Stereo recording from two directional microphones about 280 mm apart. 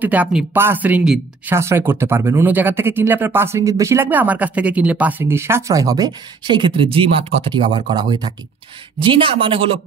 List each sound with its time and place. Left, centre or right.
0.0 s speech: centre